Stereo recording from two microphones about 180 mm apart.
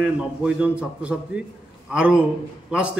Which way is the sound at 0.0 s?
5° right (ahead or behind).